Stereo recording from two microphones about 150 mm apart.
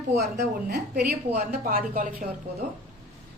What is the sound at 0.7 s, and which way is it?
Speech, 90° right.